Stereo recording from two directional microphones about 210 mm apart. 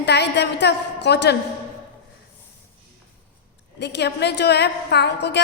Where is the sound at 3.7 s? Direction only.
55° left (ahead or behind).